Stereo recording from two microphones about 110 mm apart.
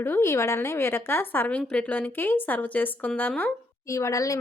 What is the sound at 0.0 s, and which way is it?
A woman's voice, 20° left (ahead or behind).